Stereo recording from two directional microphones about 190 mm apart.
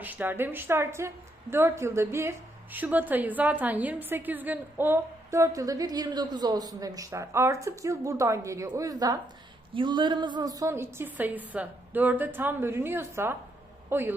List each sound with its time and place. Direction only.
0.0 s a woman's voice: 10° right (ahead or behind)